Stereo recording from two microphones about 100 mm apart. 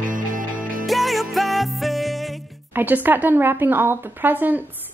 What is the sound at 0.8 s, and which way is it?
Music, centre (ahead or behind).